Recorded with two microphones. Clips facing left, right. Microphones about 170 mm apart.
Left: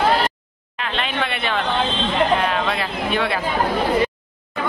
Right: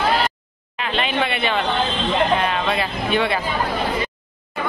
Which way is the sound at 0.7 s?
5° right (ahead or behind).